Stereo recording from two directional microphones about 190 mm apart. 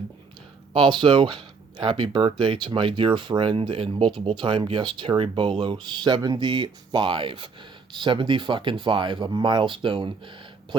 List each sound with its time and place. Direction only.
0.7 s speech: 25° right (ahead or behind)